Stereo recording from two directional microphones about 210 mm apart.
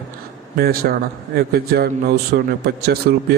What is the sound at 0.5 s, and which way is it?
A man's voice, 45° right (ahead or behind).